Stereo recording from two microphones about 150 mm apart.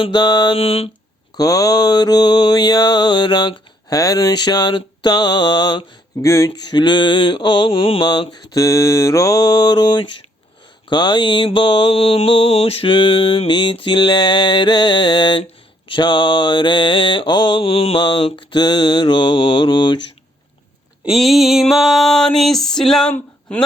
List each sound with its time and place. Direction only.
0.0 s mantra: 30° left (ahead or behind)
0.6 s mantra: 40° left (ahead or behind)
1.4 s mantra: 25° left (ahead or behind)
21.0 s a sound: centre (ahead or behind)
23.1 s a man's voice: 10° left (ahead or behind)